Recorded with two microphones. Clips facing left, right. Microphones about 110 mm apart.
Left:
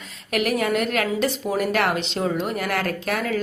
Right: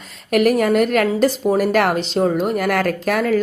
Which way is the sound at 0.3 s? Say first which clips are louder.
Right 7 dB; 45° right (ahead or behind).